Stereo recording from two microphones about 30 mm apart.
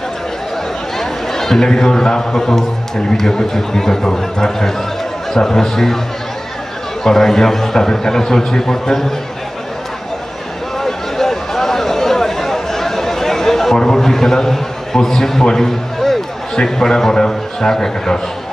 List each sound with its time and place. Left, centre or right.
0.9 s a man's voice: centre
7.0 s a man's voice: centre
10.8 s a sound: centre
13.7 s a man's voice: centre